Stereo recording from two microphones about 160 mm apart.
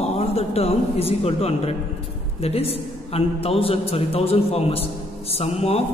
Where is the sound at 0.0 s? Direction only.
40° left (ahead or behind).